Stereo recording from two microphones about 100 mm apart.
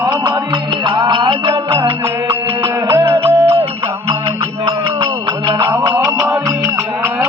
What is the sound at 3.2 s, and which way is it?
Music, 75° right (ahead or behind).